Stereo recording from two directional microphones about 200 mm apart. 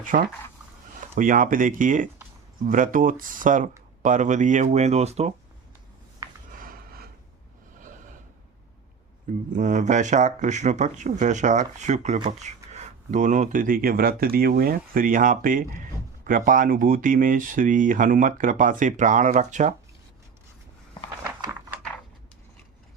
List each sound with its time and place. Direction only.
0.0 s speech: 40° right (ahead or behind)
6.6 s a sound: 45° right (ahead or behind)
9.6 s speech: 40° right (ahead or behind)